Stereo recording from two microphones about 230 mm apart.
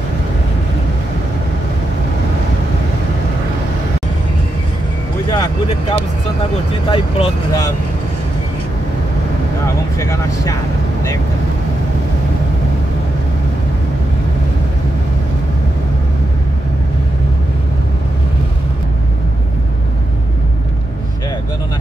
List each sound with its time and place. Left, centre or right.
5.3 s vehicle: centre
6.9 s speech: centre
9.9 s speech: centre